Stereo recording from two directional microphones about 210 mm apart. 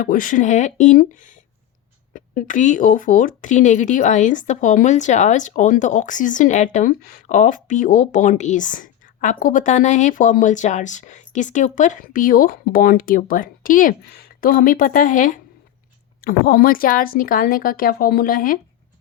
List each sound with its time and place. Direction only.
0.0 s a woman's voice: 40° left (ahead or behind)